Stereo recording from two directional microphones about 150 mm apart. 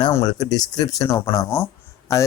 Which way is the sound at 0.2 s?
25° left (ahead or behind).